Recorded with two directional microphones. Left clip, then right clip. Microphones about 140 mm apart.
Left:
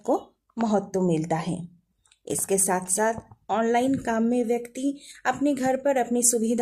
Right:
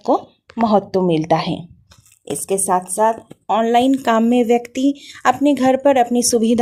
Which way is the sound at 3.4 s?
25° right (ahead or behind).